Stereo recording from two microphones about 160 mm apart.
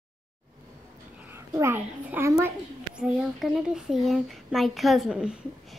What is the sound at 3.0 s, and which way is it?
A woman's voice, 5° right (ahead or behind).